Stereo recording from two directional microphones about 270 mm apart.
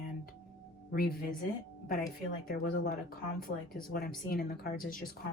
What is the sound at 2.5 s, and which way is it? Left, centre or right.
Speech, left.